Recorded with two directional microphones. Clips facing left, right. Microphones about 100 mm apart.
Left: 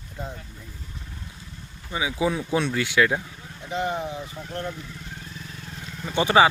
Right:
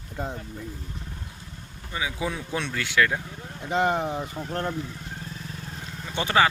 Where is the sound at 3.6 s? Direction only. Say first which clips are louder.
Right 3 dB; 55° right (ahead or behind); by 5.3 s 40° right (ahead or behind).